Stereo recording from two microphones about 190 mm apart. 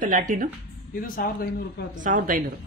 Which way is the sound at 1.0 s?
50° left (ahead or behind).